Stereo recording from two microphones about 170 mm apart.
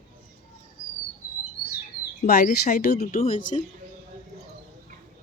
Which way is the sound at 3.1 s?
50° left (ahead or behind).